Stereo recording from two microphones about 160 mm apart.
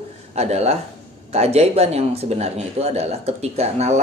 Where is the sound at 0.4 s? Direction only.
40° right (ahead or behind).